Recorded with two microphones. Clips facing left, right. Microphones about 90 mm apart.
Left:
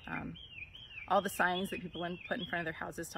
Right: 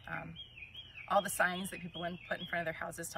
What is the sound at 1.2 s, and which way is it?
Speech, 50° left (ahead or behind).